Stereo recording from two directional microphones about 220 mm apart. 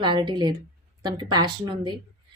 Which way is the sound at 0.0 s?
20° right (ahead or behind).